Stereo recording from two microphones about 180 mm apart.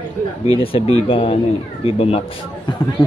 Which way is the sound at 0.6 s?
30° left (ahead or behind).